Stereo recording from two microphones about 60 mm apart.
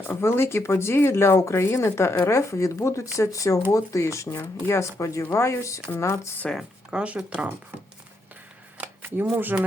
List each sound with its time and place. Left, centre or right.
0.2 s speech: left
5.2 s speech: left
6.9 s speech: right
8.8 s shuffling cards: right
9.3 s speech: right